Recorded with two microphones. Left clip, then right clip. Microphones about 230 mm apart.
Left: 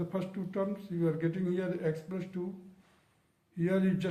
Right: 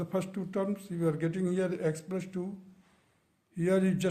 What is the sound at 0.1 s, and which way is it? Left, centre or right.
A man's voice, right.